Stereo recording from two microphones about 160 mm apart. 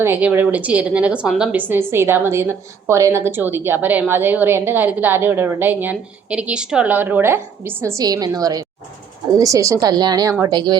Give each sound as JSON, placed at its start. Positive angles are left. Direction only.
{"t": 0.0, "sound": "a woman's voice", "side_deg": -10}